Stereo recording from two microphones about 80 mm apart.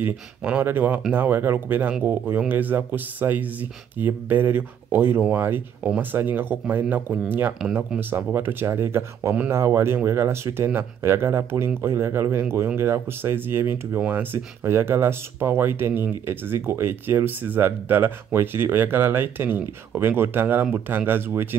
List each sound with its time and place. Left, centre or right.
0.0 s speech: right